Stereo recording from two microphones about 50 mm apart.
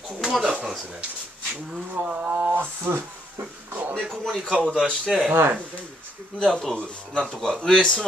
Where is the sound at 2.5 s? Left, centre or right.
Right.